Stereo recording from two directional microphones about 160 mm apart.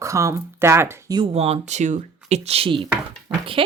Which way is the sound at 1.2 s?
40° right (ahead or behind).